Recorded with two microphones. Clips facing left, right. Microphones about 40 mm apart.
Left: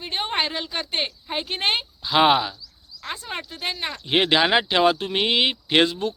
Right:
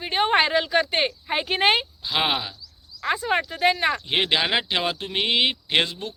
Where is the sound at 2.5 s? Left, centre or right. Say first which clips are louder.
Even; right.